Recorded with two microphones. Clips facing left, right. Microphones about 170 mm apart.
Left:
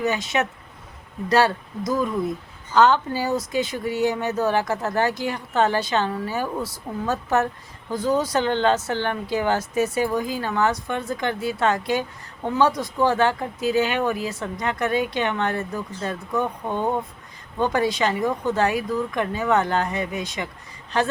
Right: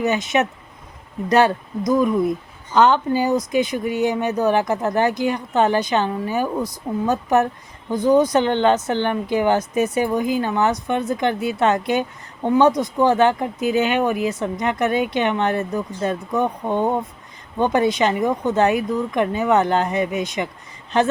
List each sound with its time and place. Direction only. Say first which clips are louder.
0.0 s speech: right 4 dB; 20° right (ahead or behind)